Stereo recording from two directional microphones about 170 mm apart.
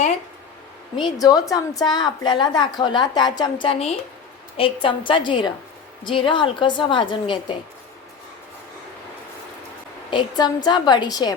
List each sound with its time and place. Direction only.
0.9 s a woman's voice: 25° left (ahead or behind)
10.1 s a woman's voice: 25° left (ahead or behind)